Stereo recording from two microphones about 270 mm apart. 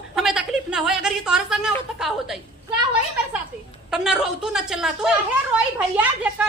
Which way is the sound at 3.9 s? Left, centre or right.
Centre.